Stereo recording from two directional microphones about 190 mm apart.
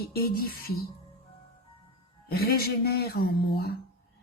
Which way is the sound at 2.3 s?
55° left (ahead or behind).